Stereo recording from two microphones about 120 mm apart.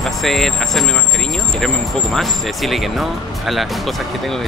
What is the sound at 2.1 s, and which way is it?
Speech, centre (ahead or behind).